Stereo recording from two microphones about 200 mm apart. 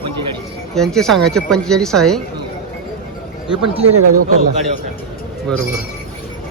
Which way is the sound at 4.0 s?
90° right.